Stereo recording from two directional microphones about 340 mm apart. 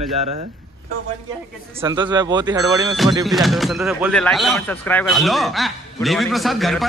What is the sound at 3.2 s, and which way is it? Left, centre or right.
Speech, centre.